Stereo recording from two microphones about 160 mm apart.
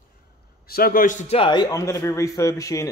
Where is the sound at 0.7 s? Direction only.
65° left (ahead or behind); by 1.5 s 45° left (ahead or behind).